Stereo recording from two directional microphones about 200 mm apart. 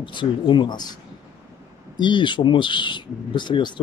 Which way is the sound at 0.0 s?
25° left (ahead or behind).